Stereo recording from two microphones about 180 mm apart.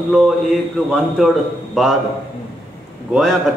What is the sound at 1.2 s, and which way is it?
Speech, centre (ahead or behind).